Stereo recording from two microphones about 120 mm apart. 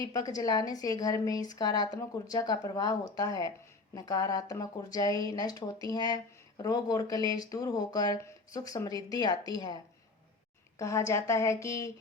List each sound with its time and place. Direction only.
0.1 s a woman's voice: 30° left (ahead or behind)
10.8 s a woman's voice: 25° left (ahead or behind)